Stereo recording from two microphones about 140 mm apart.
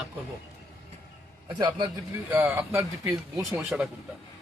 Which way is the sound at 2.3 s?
15° right (ahead or behind).